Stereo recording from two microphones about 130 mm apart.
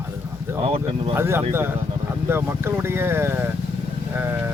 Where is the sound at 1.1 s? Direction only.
20° right (ahead or behind).